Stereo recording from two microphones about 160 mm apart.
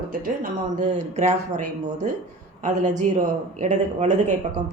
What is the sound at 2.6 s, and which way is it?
Speech, 50° right (ahead or behind).